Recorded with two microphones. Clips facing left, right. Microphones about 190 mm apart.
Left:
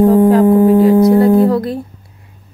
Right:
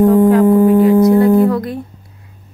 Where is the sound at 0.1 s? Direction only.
35° left (ahead or behind).